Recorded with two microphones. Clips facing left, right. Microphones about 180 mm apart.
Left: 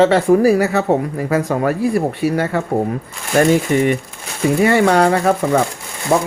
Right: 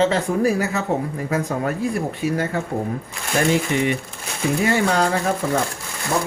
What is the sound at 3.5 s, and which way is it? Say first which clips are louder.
Speech: left 5 dB; 45° left (ahead or behind).